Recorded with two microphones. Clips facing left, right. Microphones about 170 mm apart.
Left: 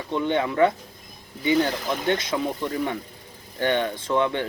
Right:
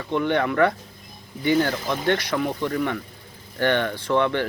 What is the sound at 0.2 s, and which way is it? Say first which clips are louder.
Speech: even; 20° left (ahead or behind).